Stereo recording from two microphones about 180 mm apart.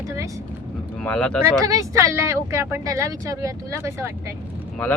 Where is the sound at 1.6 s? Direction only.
20° right (ahead or behind).